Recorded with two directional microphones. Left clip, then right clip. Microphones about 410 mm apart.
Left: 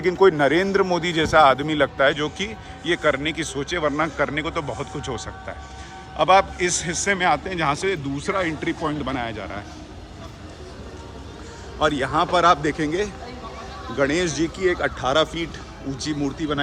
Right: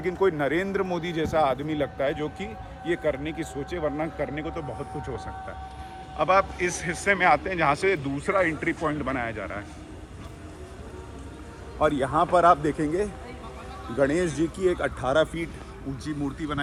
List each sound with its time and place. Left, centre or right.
0.0 s a man's voice: centre
3.9 s speech: left
4.4 s a man's voice: centre
11.8 s a man's voice: centre